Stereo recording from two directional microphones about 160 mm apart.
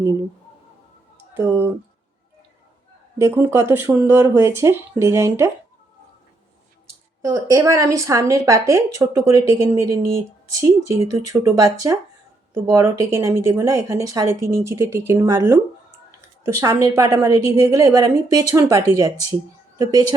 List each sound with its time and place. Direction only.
0.0 s speech: 20° right (ahead or behind)
1.5 s speech: 10° right (ahead or behind)
3.2 s speech: 15° right (ahead or behind)
7.2 s speech: 20° right (ahead or behind)
11.1 s speech: 20° right (ahead or behind)